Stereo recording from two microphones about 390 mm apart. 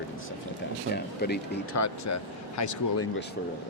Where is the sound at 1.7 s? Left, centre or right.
Left.